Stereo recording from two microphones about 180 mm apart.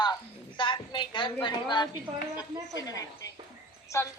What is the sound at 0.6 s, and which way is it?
A woman's voice, 25° left (ahead or behind).